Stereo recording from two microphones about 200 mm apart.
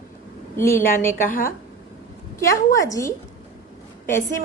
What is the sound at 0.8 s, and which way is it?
Speech, 45° left (ahead or behind).